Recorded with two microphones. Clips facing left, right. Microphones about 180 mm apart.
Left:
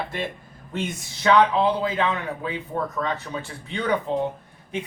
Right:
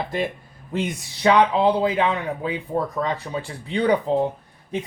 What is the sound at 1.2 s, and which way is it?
Speech, 35° right (ahead or behind).